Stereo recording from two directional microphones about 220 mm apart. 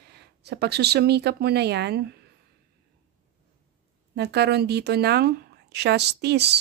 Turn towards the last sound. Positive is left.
turn(degrees=-50)  # may be behind; listen again after turning